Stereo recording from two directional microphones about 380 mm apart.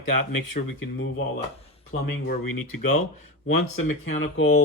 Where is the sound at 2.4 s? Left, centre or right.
Left.